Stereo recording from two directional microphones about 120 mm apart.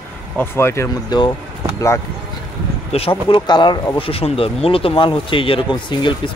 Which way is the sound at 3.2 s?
40° left (ahead or behind).